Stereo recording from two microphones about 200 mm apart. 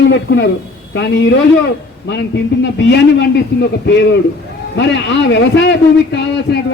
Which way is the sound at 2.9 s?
55° left (ahead or behind).